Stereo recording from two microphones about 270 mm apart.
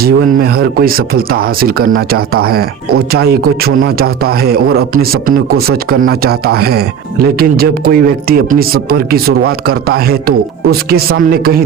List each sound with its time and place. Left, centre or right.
0.0 s speech: right